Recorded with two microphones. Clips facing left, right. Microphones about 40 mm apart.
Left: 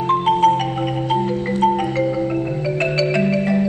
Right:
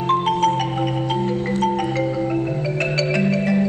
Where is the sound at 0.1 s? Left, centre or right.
Centre.